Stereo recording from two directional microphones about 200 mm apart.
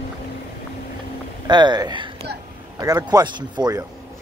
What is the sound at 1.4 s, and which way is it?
Speech, 20° right (ahead or behind).